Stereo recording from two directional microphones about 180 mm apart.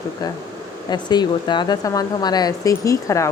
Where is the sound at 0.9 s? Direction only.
25° left (ahead or behind).